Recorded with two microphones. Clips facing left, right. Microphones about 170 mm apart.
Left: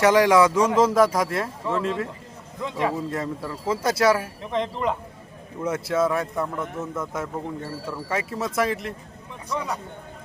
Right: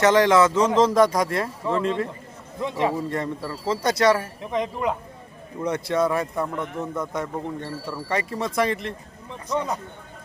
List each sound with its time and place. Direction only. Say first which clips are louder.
0.0 s a man's voice: even; 10° left (ahead or behind)
2.6 s a man's voice: right 2 dB; 20° right (ahead or behind)
2.9 s a man's voice: right 1 dB; 5° left (ahead or behind)
4.5 s speech: even; 10° right (ahead or behind)
5.5 s a man's voice: even; 5° left (ahead or behind)